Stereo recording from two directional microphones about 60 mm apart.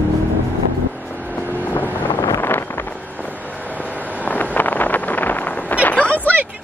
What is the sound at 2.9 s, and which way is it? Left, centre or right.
Vehicle, left.